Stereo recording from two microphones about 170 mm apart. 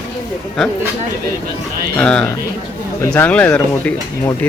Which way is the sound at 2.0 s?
5° left (ahead or behind).